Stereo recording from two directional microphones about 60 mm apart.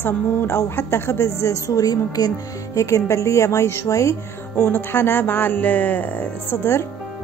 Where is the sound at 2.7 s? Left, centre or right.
Left.